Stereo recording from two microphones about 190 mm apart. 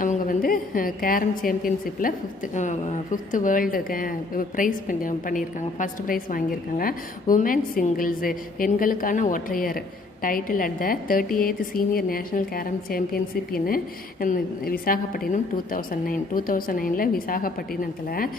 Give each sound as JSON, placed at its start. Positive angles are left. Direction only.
{"t": 0.0, "sound": "a woman's voice", "side_deg": 45}